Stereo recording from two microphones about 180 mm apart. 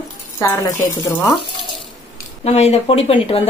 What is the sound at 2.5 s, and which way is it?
Speech, 35° left (ahead or behind).